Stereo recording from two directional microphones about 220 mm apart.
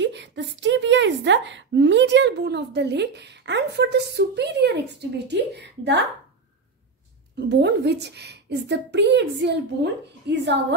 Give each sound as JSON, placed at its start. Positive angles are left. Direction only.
{"t": 0.0, "sound": "speech", "side_deg": -55}
{"t": 7.3, "sound": "speech", "side_deg": -50}